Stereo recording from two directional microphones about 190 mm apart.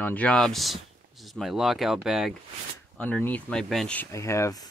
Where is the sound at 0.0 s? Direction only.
10° left (ahead or behind).